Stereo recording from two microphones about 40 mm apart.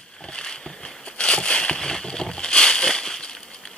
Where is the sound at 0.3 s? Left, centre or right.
Left.